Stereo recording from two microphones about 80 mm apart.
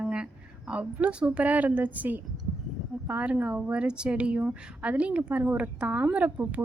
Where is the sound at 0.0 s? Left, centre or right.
Centre.